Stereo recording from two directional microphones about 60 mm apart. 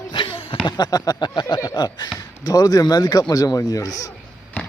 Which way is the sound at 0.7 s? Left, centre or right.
Left.